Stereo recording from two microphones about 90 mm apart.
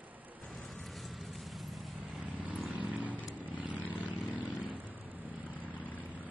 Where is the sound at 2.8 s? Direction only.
15° right (ahead or behind).